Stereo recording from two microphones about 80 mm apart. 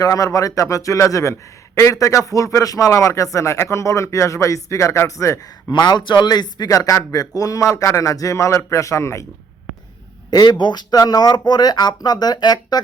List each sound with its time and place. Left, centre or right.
0.0 s speech: left
10.3 s speech: left